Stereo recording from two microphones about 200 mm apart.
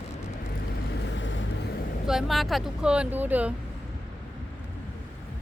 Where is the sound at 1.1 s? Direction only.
70° left (ahead or behind).